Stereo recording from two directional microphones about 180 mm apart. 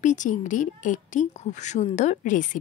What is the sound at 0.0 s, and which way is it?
A woman's voice, 45° left (ahead or behind).